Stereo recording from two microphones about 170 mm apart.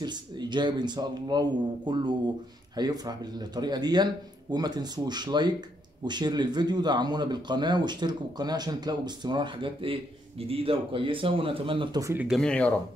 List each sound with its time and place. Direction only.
0.0 s speech: 25° right (ahead or behind)
12.3 s speech: 5° left (ahead or behind)